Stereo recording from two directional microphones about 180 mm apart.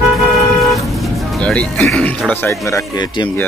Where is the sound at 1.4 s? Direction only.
5° left (ahead or behind); by 3.3 s 25° left (ahead or behind).